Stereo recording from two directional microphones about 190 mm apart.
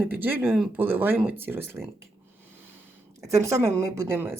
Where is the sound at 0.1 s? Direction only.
10° right (ahead or behind).